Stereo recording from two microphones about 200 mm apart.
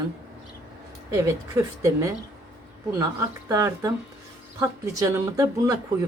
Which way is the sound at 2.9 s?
15° right (ahead or behind).